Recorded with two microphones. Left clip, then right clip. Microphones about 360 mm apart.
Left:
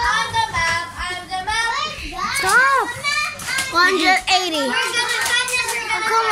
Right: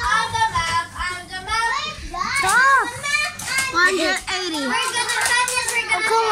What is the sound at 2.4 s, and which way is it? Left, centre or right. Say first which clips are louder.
Children playing: left 1 dB; centre.